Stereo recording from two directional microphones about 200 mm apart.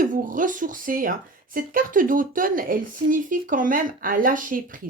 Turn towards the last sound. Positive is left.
turn(degrees=-40)  # may be behind; listen again after turning